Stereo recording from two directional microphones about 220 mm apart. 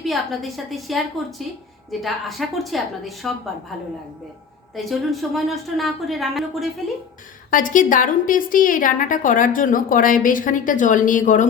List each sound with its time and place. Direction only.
0.0 s a woman's voice: centre (ahead or behind)
4.7 s a woman's voice: centre (ahead or behind)
7.5 s a woman's voice: 35° left (ahead or behind)